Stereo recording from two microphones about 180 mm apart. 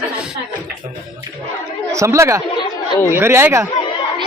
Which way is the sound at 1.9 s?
15° right (ahead or behind).